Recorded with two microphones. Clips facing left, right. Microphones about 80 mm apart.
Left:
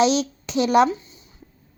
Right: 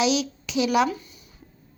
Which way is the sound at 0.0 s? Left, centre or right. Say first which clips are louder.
Left 4 dB; left.